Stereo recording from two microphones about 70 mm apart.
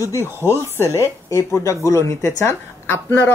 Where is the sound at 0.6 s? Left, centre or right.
Left.